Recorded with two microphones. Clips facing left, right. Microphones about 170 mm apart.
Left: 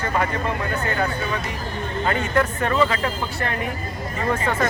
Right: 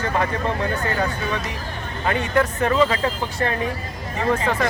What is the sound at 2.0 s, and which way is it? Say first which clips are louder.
Speech: right 1 dB; 15° right (ahead or behind).